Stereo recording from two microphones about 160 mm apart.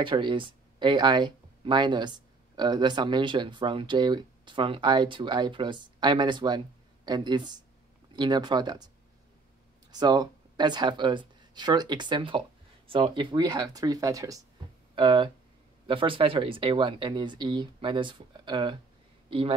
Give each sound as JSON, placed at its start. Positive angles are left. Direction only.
{"t": 0.0, "sound": "speech", "side_deg": -30}